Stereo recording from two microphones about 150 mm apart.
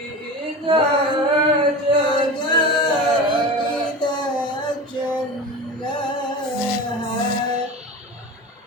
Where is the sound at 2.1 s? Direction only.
30° left (ahead or behind).